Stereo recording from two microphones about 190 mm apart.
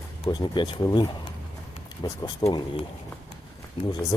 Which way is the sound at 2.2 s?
20° left (ahead or behind).